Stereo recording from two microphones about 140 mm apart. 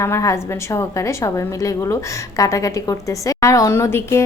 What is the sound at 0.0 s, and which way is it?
A woman's voice, 20° left (ahead or behind).